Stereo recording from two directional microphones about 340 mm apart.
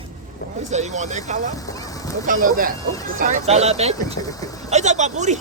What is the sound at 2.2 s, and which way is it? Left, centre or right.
Speech, right.